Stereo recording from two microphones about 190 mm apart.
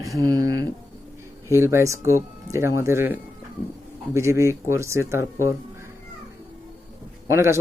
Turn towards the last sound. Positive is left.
turn(degrees=-15)  # may be behind; listen again after turning